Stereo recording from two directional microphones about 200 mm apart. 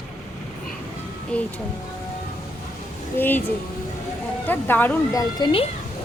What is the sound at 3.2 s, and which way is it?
Speech, 10° left (ahead or behind).